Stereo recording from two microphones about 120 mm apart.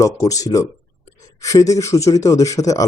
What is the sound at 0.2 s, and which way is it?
Speech, 30° left (ahead or behind).